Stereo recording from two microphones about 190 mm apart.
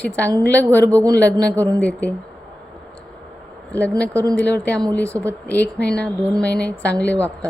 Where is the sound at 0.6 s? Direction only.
15° right (ahead or behind).